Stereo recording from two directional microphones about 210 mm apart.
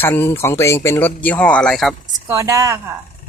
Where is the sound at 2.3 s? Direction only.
15° right (ahead or behind).